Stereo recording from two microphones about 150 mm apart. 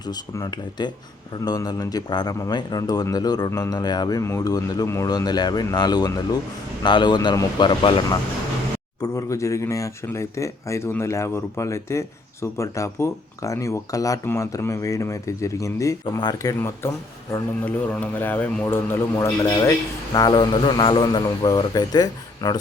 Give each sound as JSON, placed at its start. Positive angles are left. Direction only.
{"t": 0.0, "sound": "a man's voice", "side_deg": 25}